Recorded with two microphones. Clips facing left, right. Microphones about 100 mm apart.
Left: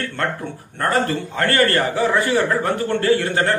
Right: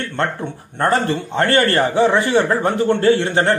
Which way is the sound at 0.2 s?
25° right (ahead or behind).